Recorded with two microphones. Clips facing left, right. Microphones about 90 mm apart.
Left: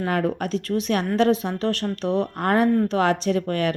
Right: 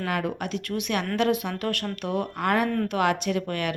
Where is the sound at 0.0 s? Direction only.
35° left (ahead or behind).